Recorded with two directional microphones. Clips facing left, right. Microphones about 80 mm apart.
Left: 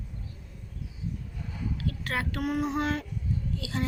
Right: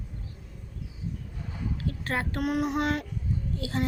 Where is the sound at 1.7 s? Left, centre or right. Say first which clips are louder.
Right 1 dB; right.